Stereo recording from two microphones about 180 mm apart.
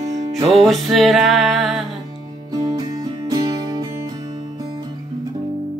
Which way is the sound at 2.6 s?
20° right (ahead or behind).